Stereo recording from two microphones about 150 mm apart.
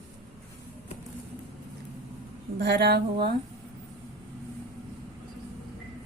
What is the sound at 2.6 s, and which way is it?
Speech, 90° right.